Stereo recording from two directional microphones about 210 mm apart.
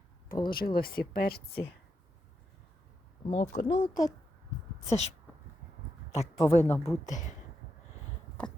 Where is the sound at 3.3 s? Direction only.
35° left (ahead or behind).